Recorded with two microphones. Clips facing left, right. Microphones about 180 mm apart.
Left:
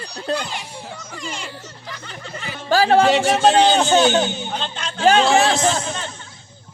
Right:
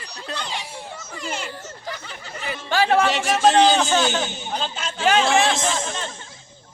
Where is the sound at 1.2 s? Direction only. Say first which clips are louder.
Right 3 dB; 5° right (ahead or behind).